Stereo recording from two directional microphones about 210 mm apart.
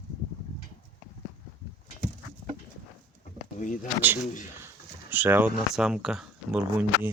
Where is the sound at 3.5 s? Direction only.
35° left (ahead or behind).